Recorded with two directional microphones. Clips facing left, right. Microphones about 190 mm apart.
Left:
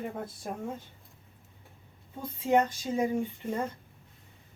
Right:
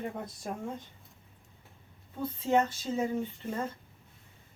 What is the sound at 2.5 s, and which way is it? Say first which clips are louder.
Speech: left 2 dB; 15° left (ahead or behind).